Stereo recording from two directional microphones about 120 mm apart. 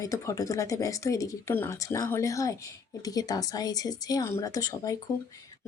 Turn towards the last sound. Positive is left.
turn(degrees=30)  # may be behind; listen again after turning